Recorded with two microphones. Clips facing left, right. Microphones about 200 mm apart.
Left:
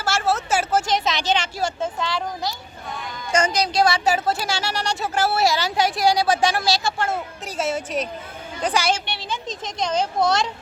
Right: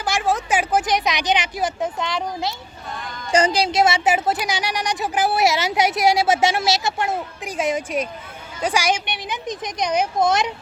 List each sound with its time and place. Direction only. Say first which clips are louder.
0.0 s a woman's voice: right 1 dB; 15° right (ahead or behind)